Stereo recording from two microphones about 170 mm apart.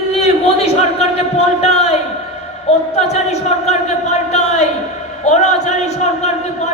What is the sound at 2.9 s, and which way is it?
A man's voice, 40° left (ahead or behind).